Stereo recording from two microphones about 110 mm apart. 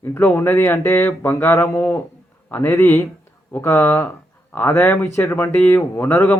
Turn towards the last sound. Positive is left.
turn(degrees=25)  # may be behind; listen again after turning